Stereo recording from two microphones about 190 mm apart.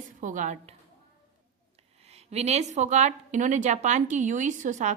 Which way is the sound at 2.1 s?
35° right (ahead or behind).